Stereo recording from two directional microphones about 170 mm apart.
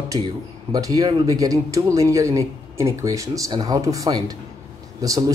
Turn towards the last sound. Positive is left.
turn(degrees=-20)  # may be behind; listen again after turning